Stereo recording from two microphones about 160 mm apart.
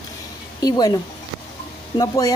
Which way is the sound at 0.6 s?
25° left (ahead or behind).